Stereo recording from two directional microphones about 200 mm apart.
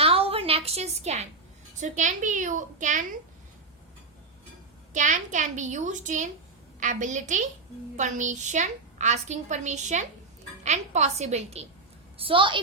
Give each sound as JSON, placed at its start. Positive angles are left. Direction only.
{"t": 0.0, "sound": "a sound", "side_deg": -30}
{"t": 1.8, "sound": "a woman's voice", "side_deg": -40}
{"t": 4.9, "sound": "a woman's voice", "side_deg": -40}